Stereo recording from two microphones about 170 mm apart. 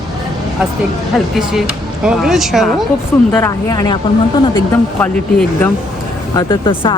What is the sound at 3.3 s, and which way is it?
Speech, 20° left (ahead or behind).